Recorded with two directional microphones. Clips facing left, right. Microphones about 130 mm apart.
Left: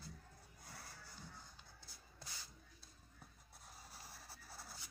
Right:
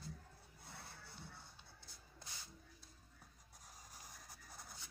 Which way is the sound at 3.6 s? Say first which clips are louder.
Left 1 dB; 10° left (ahead or behind).